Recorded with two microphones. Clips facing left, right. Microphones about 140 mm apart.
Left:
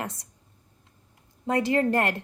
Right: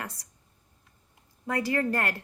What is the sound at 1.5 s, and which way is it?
Speech, 20° left (ahead or behind).